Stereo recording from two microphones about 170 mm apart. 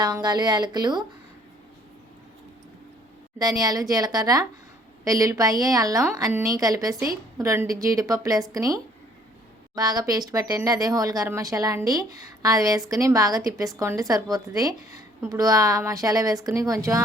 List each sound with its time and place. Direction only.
0.0 s speech: 25° right (ahead or behind)
3.6 s speech: 20° right (ahead or behind)